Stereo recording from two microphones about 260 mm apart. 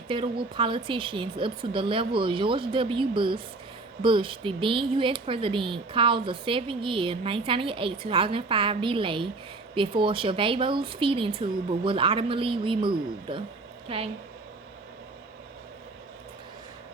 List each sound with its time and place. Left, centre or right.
0.1 s speech: centre